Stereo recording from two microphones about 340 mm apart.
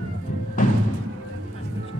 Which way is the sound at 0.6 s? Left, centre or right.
Left.